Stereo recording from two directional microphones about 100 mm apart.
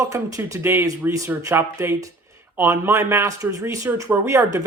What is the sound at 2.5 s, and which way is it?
Speech, 25° right (ahead or behind).